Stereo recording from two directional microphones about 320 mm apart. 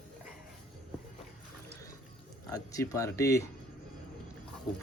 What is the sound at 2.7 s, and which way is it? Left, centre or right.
Speech, centre.